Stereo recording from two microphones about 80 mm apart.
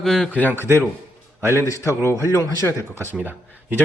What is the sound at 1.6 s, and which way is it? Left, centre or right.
Speech, left.